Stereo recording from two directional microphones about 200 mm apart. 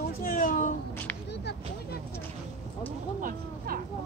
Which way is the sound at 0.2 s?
40° left (ahead or behind).